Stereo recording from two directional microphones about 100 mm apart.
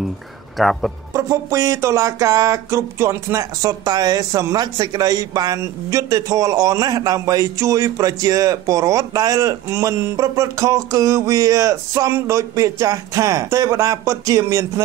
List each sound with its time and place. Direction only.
0.6 s speech: centre (ahead or behind)
1.1 s speech: 35° right (ahead or behind)